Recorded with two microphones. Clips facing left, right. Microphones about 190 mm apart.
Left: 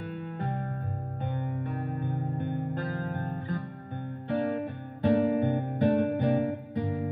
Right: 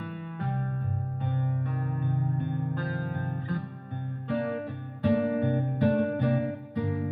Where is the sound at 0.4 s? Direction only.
50° left (ahead or behind).